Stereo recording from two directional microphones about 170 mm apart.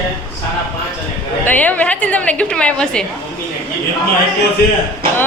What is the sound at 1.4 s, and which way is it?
Speech, 10° left (ahead or behind).